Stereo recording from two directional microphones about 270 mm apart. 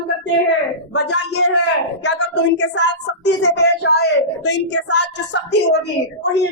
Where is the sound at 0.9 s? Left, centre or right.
Left.